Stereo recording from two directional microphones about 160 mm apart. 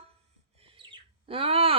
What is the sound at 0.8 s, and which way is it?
Bird, 35° right (ahead or behind).